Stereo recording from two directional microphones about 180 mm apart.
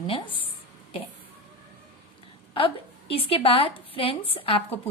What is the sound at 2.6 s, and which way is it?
A woman's voice, 30° left (ahead or behind).